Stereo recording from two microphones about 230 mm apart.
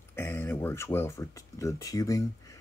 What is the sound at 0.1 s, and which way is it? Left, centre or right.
Speech, centre.